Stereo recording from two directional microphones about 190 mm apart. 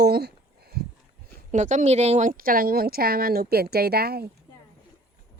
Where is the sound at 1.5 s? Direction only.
40° right (ahead or behind).